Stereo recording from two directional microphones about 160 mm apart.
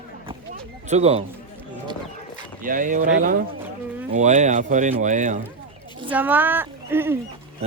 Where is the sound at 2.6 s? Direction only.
55° right (ahead or behind).